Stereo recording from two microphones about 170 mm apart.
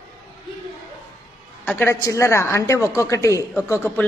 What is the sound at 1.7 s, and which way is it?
A woman's voice, 10° left (ahead or behind).